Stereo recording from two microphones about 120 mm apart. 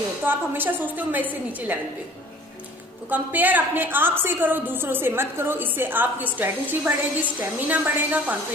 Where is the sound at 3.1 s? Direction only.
15° right (ahead or behind).